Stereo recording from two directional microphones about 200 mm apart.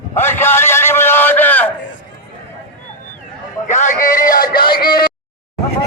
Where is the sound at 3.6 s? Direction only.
40° left (ahead or behind).